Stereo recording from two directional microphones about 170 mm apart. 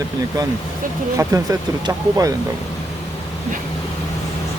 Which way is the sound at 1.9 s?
20° right (ahead or behind).